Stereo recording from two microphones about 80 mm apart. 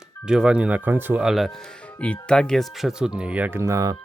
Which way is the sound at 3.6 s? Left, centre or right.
Right.